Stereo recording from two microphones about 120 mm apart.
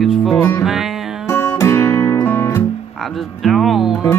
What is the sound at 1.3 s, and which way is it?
Music, 20° left (ahead or behind).